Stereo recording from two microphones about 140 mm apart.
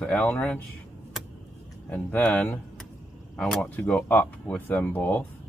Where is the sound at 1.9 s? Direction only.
15° left (ahead or behind).